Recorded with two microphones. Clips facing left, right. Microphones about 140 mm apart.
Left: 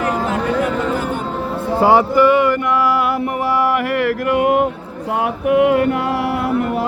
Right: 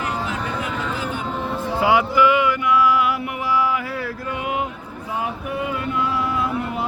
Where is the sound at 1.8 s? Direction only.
45° left (ahead or behind).